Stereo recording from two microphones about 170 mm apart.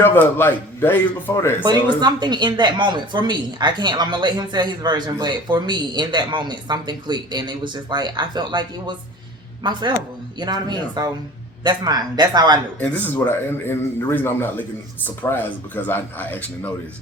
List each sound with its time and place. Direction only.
0.0 s a man's voice: 10° left (ahead or behind)
1.6 s speech: 25° right (ahead or behind)
12.8 s a man's voice: 10° left (ahead or behind)